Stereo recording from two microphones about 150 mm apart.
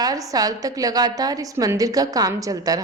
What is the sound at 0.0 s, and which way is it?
A woman's voice, 25° right (ahead or behind).